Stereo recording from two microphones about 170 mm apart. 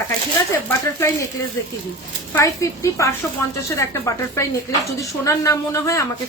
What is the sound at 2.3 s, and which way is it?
A woman's voice, 20° left (ahead or behind).